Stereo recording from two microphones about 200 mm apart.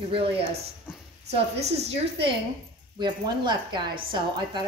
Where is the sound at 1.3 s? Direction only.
30° right (ahead or behind).